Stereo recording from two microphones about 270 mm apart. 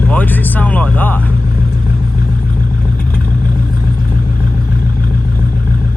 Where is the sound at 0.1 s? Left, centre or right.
Centre.